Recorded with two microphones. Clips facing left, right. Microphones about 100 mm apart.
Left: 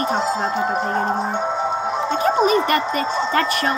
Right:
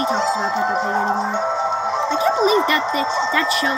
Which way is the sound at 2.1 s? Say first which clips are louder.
Even; 50° left (ahead or behind).